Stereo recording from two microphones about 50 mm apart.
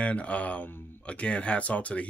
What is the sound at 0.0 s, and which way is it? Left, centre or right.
Speech, left.